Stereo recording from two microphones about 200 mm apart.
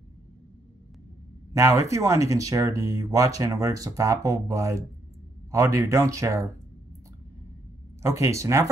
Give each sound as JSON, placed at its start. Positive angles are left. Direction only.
{"t": 1.5, "sound": "speech", "side_deg": -15}
{"t": 8.0, "sound": "speech", "side_deg": -15}